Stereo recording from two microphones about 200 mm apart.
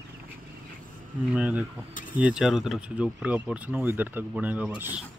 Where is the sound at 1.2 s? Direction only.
5° right (ahead or behind).